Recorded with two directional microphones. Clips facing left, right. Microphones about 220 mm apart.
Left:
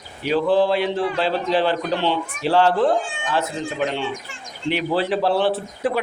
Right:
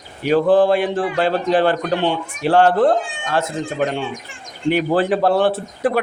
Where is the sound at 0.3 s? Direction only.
45° right (ahead or behind).